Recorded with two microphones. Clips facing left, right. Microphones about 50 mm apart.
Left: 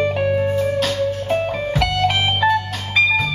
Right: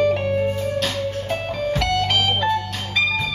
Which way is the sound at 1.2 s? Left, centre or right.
Centre.